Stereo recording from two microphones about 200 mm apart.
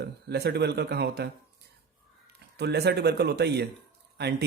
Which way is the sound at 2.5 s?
55° right (ahead or behind).